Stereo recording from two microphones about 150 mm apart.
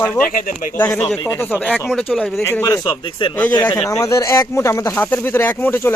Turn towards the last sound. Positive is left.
turn(degrees=15)  # may be behind; listen again after turning